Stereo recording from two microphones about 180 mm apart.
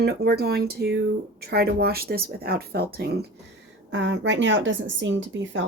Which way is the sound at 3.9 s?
90° right.